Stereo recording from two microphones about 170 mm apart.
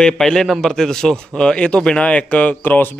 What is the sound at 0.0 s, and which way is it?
A man's voice, 5° left (ahead or behind).